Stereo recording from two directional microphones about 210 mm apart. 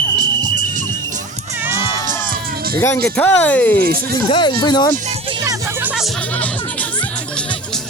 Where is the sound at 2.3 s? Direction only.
45° right (ahead or behind).